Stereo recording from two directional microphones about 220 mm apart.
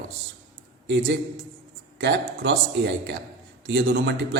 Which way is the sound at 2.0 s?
55° right (ahead or behind).